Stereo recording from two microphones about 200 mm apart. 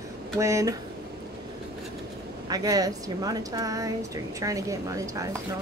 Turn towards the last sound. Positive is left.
turn(degrees=-15)  # may be behind; listen again after turning